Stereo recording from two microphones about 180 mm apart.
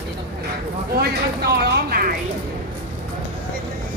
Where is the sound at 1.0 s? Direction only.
60° right (ahead or behind).